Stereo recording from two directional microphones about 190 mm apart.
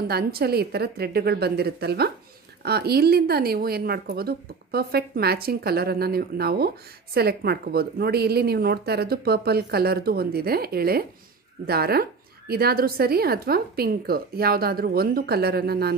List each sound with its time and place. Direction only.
0.1 s speech: 55° right (ahead or behind)